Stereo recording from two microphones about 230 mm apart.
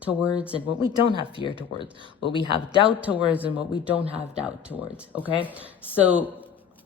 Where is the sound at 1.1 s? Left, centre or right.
Left.